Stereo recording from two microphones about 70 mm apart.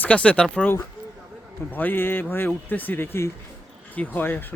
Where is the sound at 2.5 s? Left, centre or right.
Left.